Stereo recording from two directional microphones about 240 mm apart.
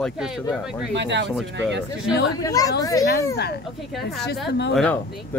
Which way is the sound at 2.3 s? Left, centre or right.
Centre.